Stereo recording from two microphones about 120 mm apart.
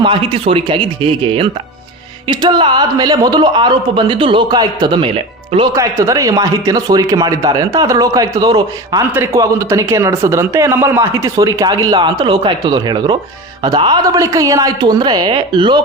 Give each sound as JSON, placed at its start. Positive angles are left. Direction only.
{"t": 0.0, "sound": "a man's voice", "side_deg": -45}
{"t": 5.6, "sound": "a man's voice", "side_deg": -25}